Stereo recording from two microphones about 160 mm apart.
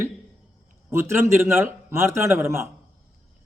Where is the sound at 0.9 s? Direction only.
15° right (ahead or behind).